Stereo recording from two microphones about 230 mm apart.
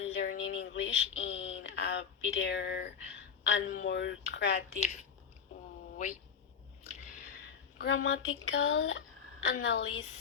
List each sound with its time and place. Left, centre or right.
0.1 s a sound: left
3.8 s speech: left
7.8 s speech: left